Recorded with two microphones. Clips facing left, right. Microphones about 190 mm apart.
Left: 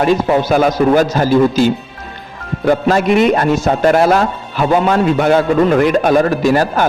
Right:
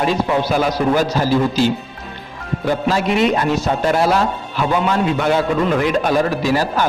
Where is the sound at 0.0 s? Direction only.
50° left (ahead or behind).